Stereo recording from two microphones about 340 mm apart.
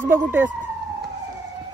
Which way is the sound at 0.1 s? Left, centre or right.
Centre.